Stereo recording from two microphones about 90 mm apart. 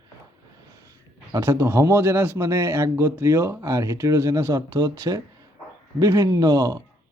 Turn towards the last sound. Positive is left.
turn(degrees=-45)  # may be behind; listen again after turning